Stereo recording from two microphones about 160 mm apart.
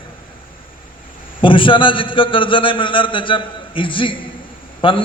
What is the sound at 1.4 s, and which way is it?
A man's voice, 30° left (ahead or behind).